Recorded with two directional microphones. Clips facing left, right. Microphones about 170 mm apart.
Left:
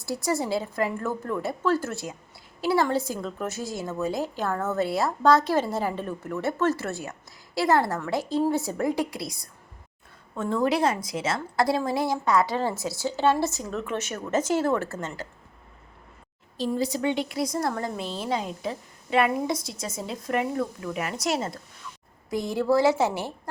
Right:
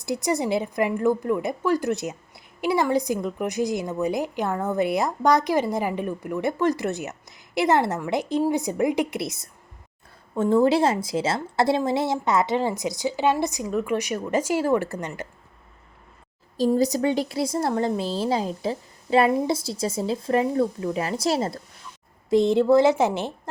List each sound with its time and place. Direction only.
0.0 s a woman's voice: 20° right (ahead or behind)
16.6 s a woman's voice: 40° right (ahead or behind); by 23.3 s 20° right (ahead or behind)